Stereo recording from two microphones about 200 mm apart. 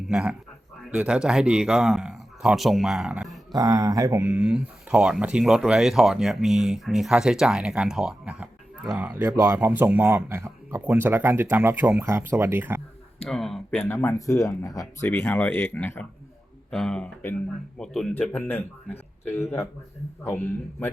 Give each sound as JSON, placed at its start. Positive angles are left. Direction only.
{"t": 0.1, "sound": "a man's voice", "side_deg": -5}
{"t": 3.5, "sound": "speech", "side_deg": -20}
{"t": 4.4, "sound": "speech", "side_deg": -5}
{"t": 13.2, "sound": "a sound", "side_deg": 0}
{"t": 13.8, "sound": "speech", "side_deg": 15}
{"t": 20.2, "sound": "speech", "side_deg": 10}